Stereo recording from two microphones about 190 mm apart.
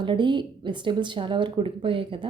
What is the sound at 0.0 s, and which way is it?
A woman's voice, 25° right (ahead or behind).